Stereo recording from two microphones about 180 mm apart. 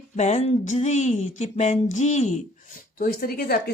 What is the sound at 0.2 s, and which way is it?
Speech, 40° left (ahead or behind).